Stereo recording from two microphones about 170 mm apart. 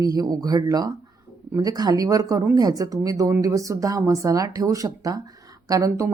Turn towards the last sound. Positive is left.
turn(degrees=-20)  # may be behind; listen again after turning